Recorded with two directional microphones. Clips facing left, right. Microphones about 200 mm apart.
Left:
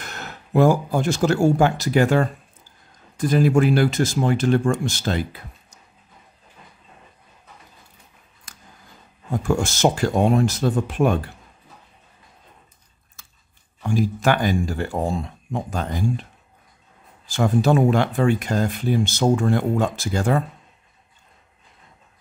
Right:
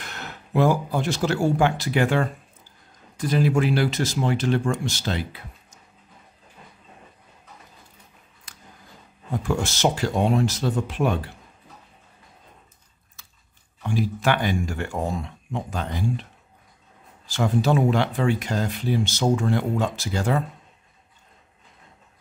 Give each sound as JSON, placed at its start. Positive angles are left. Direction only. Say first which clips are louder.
{"t": 0.0, "sound": "speech", "louder": "left 2 dB", "side_deg": 45}
{"t": 8.5, "sound": "a sound", "louder": "left 2 dB", "side_deg": 45}
{"t": 9.4, "sound": "speech", "louder": "left 4 dB", "side_deg": 45}
{"t": 13.8, "sound": "speech", "louder": "left 3 dB", "side_deg": 45}
{"t": 15.5, "sound": "speech", "louder": "left 3 dB", "side_deg": 45}
{"t": 17.3, "sound": "speech", "louder": "left 3 dB", "side_deg": 50}